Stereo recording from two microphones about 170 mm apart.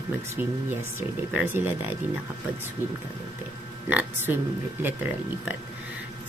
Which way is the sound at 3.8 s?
10° right (ahead or behind).